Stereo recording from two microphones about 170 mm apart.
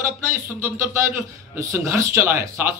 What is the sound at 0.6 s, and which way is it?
Speech, 15° right (ahead or behind).